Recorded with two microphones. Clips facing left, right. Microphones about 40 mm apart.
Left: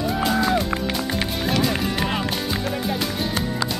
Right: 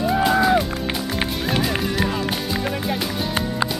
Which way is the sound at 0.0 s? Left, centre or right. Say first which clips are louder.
Right 4 dB; centre.